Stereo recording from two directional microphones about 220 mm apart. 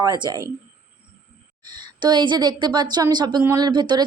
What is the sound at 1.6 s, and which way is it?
A woman's voice, 20° right (ahead or behind).